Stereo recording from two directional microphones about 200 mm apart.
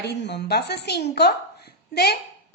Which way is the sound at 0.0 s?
55° left (ahead or behind).